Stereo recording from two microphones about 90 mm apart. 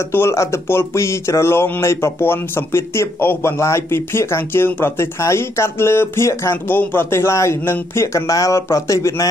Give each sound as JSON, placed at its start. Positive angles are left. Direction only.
{"t": 0.1, "sound": "speech", "side_deg": 30}